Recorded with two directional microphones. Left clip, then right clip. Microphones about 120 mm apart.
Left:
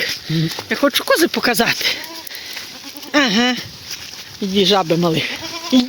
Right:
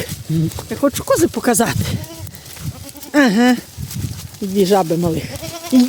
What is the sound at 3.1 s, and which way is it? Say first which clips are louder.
Speech: right 2 dB; 45° right (ahead or behind).